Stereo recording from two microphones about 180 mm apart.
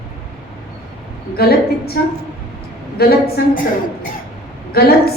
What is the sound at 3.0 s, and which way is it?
Speech, 60° left (ahead or behind).